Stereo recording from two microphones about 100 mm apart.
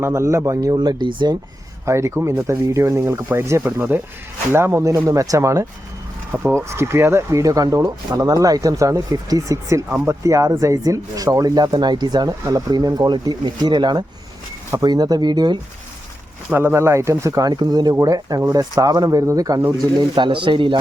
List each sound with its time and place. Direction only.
0.0 s speech: 30° right (ahead or behind); by 1.4 s 45° right (ahead or behind)
1.8 s speech: 30° right (ahead or behind); by 15.5 s 45° right (ahead or behind)
16.5 s speech: 20° right (ahead or behind)
20.0 s speech: 50° right (ahead or behind)